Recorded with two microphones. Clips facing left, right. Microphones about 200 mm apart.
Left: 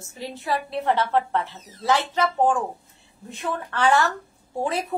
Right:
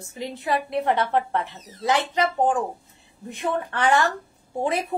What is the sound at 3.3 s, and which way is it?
Speech, 20° right (ahead or behind).